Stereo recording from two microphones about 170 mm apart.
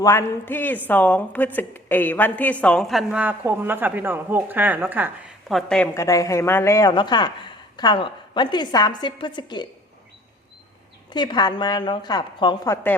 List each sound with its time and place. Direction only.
0.0 s a woman's voice: 15° left (ahead or behind); by 5.1 s 10° right (ahead or behind)
5.5 s a woman's voice: centre (ahead or behind)
5.9 s speech: 20° left (ahead or behind)
11.1 s speech: 25° left (ahead or behind)
12.7 s a woman's voice: 10° left (ahead or behind)